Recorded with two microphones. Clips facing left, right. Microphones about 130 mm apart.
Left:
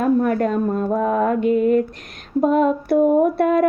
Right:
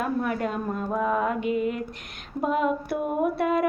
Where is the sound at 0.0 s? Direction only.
45° left (ahead or behind).